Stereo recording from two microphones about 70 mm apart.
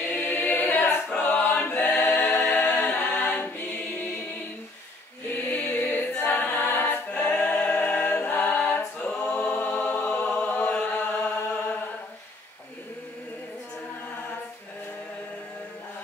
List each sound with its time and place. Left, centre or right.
0.1 s choir: left
1.2 s a capella: left
5.3 s a capella: centre
9.2 s choir: left
9.6 s chant: left